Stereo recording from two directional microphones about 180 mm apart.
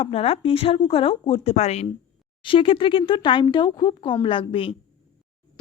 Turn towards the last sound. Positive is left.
turn(degrees=30)  # may be behind; listen again after turning